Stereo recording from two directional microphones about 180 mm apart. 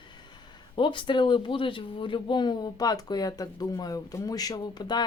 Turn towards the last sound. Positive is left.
turn(degrees=25)  # may be behind; listen again after turning